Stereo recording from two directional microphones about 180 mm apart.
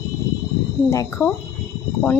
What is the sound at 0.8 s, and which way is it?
Speech, 15° left (ahead or behind).